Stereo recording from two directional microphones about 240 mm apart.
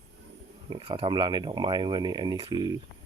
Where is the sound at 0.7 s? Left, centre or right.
Right.